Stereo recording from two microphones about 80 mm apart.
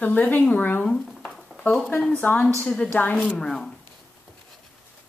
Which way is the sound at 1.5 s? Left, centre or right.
Centre.